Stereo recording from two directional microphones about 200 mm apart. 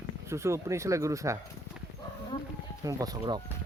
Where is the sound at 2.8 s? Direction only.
15° right (ahead or behind).